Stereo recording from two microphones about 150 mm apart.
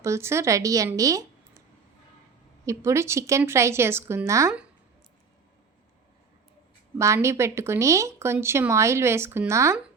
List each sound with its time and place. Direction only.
0.0 s a woman's voice: 20° right (ahead or behind)
0.9 s a sound: 20° right (ahead or behind)
2.6 s a woman's voice: 20° right (ahead or behind)
7.0 s speech: 20° right (ahead or behind)